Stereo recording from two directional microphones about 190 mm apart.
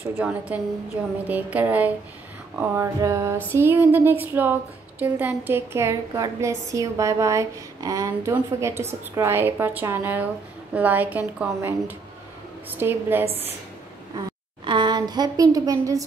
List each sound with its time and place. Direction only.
0.0 s speech: 10° right (ahead or behind)
12.7 s speech: 10° right (ahead or behind)
14.1 s a sound: 25° right (ahead or behind)